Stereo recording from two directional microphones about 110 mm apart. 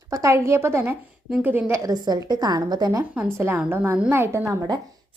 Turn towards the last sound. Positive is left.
turn(degrees=-25)  # may be behind; listen again after turning